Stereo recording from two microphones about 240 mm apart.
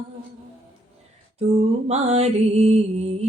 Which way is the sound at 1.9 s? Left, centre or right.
Right.